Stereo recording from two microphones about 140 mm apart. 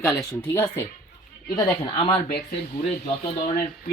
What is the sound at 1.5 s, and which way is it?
Speech, 35° left (ahead or behind).